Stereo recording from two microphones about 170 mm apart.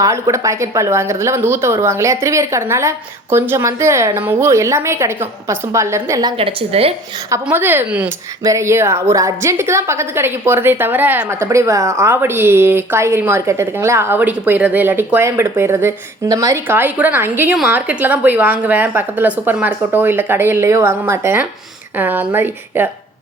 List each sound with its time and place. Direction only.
0.0 s a woman's voice: 15° right (ahead or behind)
6.3 s a woman's voice: 35° right (ahead or behind)
7.4 s a woman's voice: 10° right (ahead or behind)